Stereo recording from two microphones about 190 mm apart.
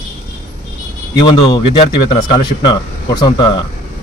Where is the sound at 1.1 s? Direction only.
25° left (ahead or behind).